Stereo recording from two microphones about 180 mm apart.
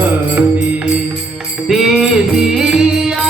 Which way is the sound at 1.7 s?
5° right (ahead or behind).